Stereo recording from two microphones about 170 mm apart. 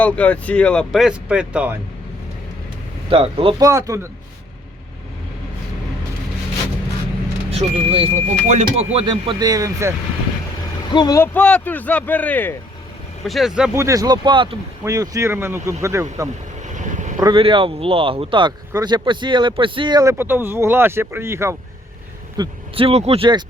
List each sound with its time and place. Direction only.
0.0 s speech: 10° left (ahead or behind)
3.1 s speech: 30° right (ahead or behind)
3.6 s speech: 20° right (ahead or behind)
7.5 s speech: 35° right (ahead or behind); by 9.9 s 20° right (ahead or behind)
10.9 s speech: 20° left (ahead or behind)
11.3 s speech: 5° left (ahead or behind)
13.2 s speech: centre (ahead or behind)
13.7 s speech: 20° right (ahead or behind)
16.6 s vehicle: 45° right (ahead or behind)
17.2 s speech: 30° right (ahead or behind)
22.4 s speech: 30° right (ahead or behind)